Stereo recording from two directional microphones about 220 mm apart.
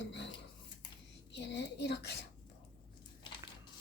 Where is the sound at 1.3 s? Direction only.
50° left (ahead or behind).